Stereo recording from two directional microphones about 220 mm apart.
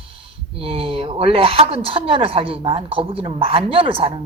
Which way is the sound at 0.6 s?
25° right (ahead or behind).